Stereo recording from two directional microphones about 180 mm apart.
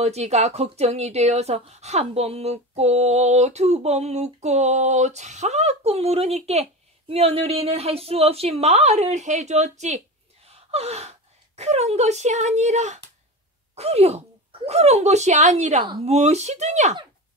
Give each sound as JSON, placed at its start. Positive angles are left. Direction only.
{"t": 0.0, "sound": "a woman's voice", "side_deg": -35}
{"t": 15.8, "sound": "speech", "side_deg": -25}
{"t": 16.1, "sound": "a woman's voice", "side_deg": -35}